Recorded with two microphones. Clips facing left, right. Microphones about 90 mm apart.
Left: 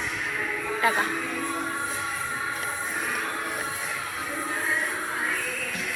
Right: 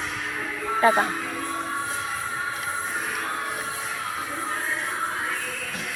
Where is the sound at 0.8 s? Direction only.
35° right (ahead or behind).